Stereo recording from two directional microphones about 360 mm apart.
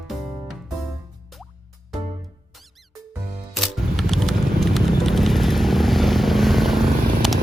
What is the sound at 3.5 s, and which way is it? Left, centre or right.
Music, centre.